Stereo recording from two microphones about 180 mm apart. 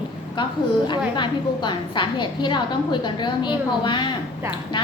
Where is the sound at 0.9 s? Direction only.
25° left (ahead or behind).